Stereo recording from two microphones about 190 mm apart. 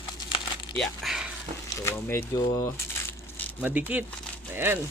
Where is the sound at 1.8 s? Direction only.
15° left (ahead or behind).